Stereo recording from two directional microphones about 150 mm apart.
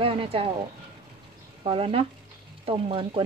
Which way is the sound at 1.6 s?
35° right (ahead or behind).